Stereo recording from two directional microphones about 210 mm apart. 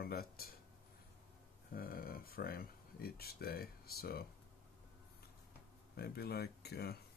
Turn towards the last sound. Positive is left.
turn(degrees=50)  # may be behind; listen again after turning